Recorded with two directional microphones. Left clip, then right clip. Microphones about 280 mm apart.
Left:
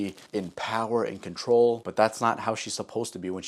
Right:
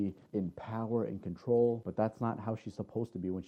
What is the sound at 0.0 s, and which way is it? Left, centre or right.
Speech, centre.